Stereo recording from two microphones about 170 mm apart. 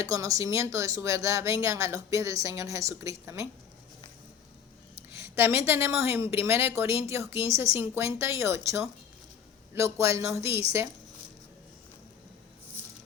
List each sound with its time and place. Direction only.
0.0 s speech: 20° right (ahead or behind)
5.1 s a woman's voice: 15° right (ahead or behind)